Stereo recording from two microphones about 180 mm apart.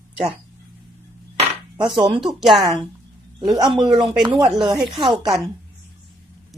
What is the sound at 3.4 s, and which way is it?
Speech, 20° right (ahead or behind).